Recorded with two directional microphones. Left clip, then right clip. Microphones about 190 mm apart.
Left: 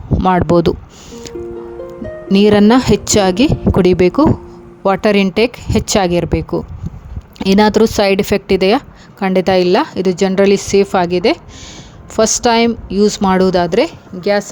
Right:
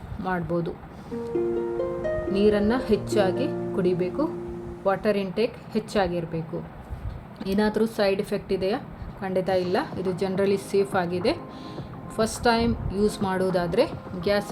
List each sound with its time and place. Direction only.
0.2 s speech: 60° left (ahead or behind)
1.8 s music: centre (ahead or behind)
2.3 s speech: 60° left (ahead or behind); by 14.5 s 40° left (ahead or behind)